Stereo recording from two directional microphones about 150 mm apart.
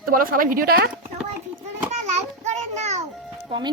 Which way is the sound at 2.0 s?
50° right (ahead or behind).